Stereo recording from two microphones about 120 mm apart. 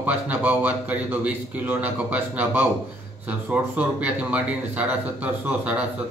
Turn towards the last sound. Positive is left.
turn(degrees=-10)  # may be behind; listen again after turning